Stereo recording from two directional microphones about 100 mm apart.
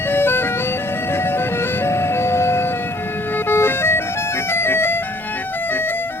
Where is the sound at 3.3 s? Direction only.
20° left (ahead or behind).